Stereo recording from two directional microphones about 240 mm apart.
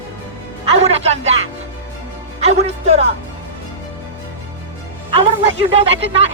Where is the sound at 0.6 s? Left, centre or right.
Right.